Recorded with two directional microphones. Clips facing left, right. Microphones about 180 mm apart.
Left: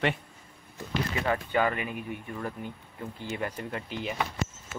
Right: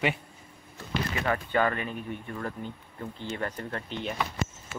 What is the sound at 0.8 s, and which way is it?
Speech, 15° left (ahead or behind).